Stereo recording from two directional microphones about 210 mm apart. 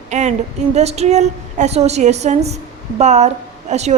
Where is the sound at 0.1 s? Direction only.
35° right (ahead or behind).